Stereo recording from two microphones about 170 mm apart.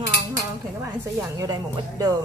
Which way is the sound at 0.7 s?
15° right (ahead or behind).